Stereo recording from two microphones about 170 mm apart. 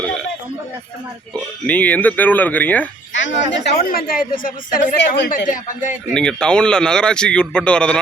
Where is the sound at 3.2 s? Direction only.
90° left; by 4.8 s 55° left (ahead or behind).